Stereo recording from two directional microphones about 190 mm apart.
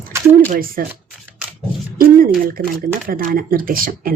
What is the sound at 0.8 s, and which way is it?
Speech, 50° right (ahead or behind).